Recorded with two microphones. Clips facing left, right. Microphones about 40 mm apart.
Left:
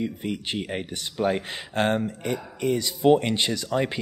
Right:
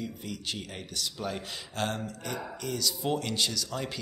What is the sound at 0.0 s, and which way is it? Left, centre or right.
Speech, left.